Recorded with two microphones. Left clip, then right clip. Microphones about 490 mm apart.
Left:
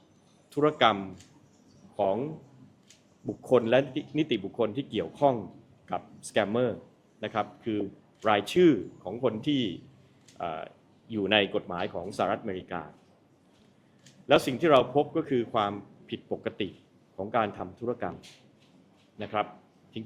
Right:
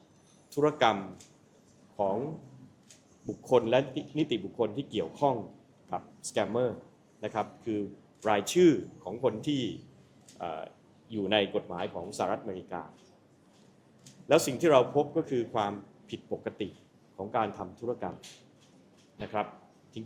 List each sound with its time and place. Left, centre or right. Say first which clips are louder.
0.5 s speech: left 2 dB; left
3.4 s a man's voice: left 2 dB; left
14.3 s speech: left 2 dB; left